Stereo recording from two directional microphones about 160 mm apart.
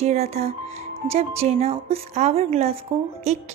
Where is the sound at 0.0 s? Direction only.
45° right (ahead or behind).